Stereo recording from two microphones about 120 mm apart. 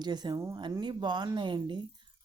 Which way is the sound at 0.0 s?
35° right (ahead or behind).